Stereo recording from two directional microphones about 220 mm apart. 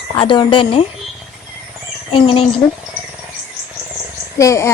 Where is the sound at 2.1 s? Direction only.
25° left (ahead or behind).